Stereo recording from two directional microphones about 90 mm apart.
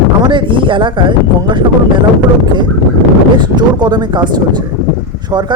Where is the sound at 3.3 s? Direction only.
55° right (ahead or behind).